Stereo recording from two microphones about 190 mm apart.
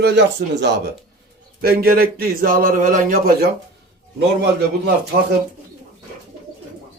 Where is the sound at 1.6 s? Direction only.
55° right (ahead or behind).